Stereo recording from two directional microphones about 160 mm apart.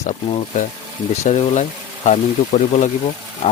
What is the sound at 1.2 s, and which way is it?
Speech, 45° left (ahead or behind).